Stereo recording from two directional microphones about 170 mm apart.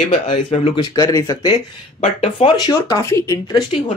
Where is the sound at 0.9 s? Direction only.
20° left (ahead or behind).